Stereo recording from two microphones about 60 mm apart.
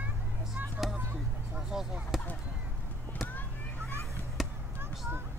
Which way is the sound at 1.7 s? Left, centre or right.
Centre.